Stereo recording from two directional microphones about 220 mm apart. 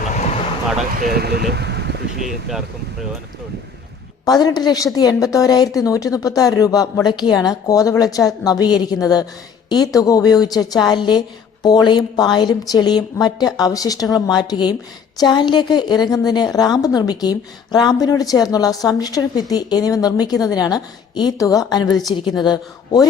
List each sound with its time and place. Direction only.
0.9 s speech: 45° right (ahead or behind)
2.5 s speech: centre (ahead or behind)
4.3 s a woman's voice: 15° left (ahead or behind)